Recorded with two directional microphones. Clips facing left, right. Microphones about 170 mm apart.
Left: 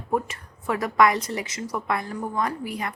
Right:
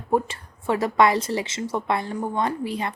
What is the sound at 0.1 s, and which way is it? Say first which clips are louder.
Speech: right 3 dB; 30° right (ahead or behind).